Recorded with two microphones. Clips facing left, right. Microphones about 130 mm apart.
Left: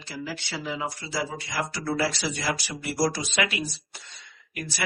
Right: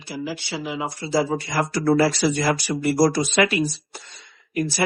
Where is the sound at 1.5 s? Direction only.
50° right (ahead or behind).